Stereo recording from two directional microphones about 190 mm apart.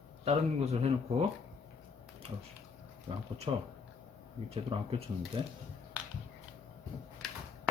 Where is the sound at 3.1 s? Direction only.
25° right (ahead or behind).